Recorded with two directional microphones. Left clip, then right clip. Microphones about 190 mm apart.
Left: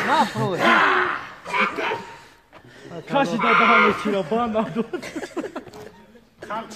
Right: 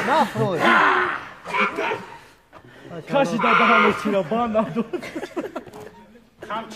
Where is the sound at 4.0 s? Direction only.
50° right (ahead or behind).